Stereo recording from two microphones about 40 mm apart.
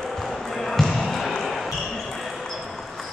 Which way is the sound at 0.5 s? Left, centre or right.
Centre.